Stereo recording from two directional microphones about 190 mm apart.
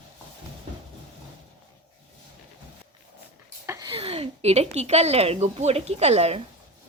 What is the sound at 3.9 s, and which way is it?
A woman's voice, 30° right (ahead or behind).